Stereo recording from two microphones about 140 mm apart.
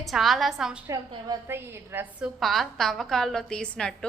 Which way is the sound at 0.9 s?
20° right (ahead or behind).